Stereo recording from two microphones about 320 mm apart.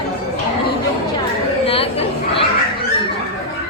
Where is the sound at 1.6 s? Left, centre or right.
Centre.